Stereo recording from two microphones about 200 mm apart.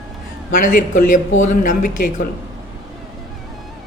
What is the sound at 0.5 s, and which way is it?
A man's voice, 40° left (ahead or behind).